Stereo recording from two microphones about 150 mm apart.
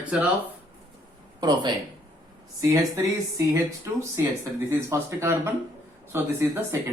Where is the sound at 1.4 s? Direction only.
25° right (ahead or behind).